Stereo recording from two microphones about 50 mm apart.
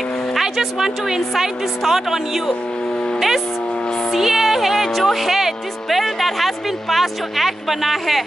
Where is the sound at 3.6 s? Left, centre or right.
Centre.